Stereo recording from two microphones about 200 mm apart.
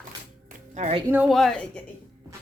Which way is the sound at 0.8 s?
35° right (ahead or behind).